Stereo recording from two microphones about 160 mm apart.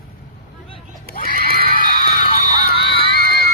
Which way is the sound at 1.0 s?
65° left (ahead or behind).